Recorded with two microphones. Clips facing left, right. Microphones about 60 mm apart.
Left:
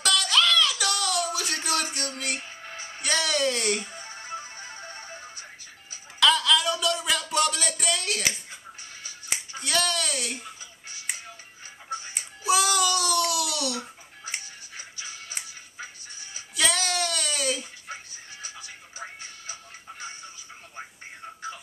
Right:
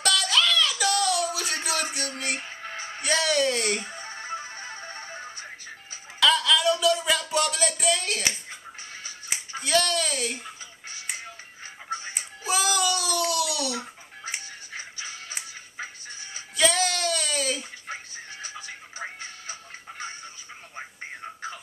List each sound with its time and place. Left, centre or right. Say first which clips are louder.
0.0 s a sound: even; centre
2.4 s music: right 4 dB; right
3.0 s a sound: right 2 dB; centre
3.9 s music: right 3 dB; right
6.1 s a sound: even; centre
9.6 s speech: right 3 dB; centre
12.1 s a child's voice: left 6 dB; centre
14.2 s music: right 1 dB; right
16.5 s child singing: right 2 dB; centre
18.9 s music: right 3 dB; right